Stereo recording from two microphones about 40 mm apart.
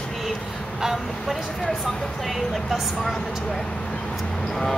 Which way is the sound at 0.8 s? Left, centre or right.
Centre.